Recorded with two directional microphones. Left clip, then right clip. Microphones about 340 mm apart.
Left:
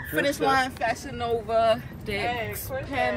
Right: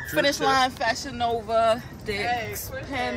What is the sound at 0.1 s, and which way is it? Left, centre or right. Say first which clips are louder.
A man's voice: right 1 dB; centre.